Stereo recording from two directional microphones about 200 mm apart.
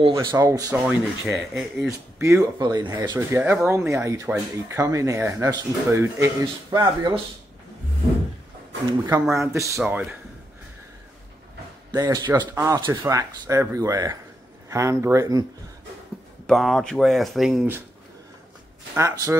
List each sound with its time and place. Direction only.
0.1 s speech: 15° right (ahead or behind)
2.1 s speech: 15° right (ahead or behind)
9.3 s speech: 15° right (ahead or behind)
11.9 s speech: 20° right (ahead or behind)
16.4 s speech: centre (ahead or behind)
18.9 s speech: 15° right (ahead or behind)